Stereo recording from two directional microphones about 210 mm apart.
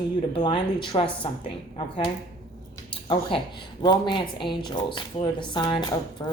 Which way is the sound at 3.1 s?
25° left (ahead or behind).